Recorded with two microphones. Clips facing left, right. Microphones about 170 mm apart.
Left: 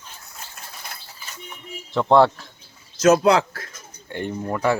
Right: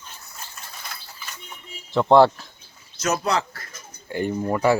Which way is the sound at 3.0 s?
75° left (ahead or behind).